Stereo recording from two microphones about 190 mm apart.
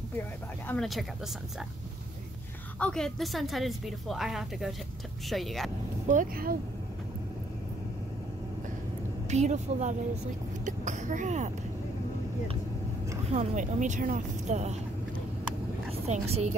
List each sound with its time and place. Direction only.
0.7 s a woman's voice: centre (ahead or behind)
2.8 s a woman's voice: 5° left (ahead or behind)
6.0 s speech: 45° right (ahead or behind)
9.3 s speech: 40° right (ahead or behind)
13.3 s speech: 35° right (ahead or behind)
15.9 s speech: 35° right (ahead or behind)